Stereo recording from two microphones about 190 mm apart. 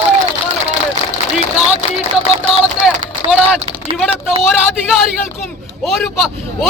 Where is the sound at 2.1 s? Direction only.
30° right (ahead or behind).